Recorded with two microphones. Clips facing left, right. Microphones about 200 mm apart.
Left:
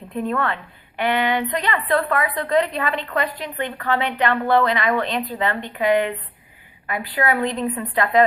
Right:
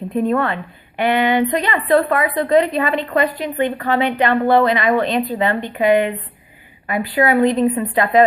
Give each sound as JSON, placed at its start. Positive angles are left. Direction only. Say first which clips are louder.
{"t": 0.2, "sound": "a woman's voice", "louder": "right 5 dB", "side_deg": -20}